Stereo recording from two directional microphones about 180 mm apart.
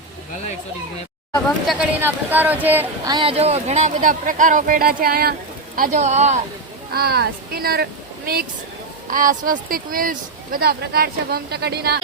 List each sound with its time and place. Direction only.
1.6 s speech: 10° right (ahead or behind)
3.1 s speech: 30° right (ahead or behind)
6.9 s speech: 60° right (ahead or behind)
9.0 s speech: 50° right (ahead or behind); by 11.9 s 65° right (ahead or behind)